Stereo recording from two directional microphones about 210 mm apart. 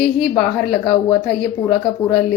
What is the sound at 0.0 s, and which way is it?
A woman's voice, centre (ahead or behind).